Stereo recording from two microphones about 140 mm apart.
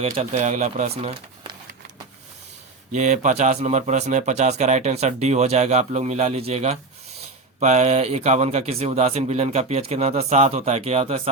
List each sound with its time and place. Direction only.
0.0 s a man's voice: 50° right (ahead or behind)
2.9 s a man's voice: 60° right (ahead or behind)